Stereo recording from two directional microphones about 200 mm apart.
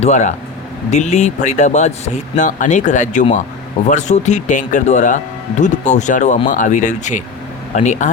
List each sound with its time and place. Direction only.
0.0 s speech: 35° left (ahead or behind)